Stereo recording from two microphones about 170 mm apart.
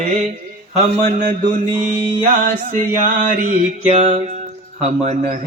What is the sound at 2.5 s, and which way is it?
A man's voice, 55° right (ahead or behind).